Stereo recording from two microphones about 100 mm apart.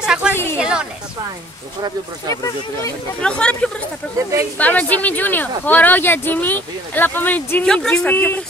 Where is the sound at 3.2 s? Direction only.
10° left (ahead or behind).